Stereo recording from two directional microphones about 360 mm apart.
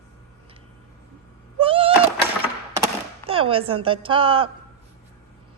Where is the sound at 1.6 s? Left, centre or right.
Centre.